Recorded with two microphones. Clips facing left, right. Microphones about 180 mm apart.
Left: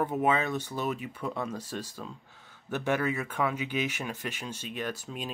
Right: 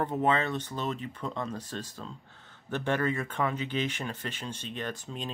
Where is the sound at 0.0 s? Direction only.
10° left (ahead or behind).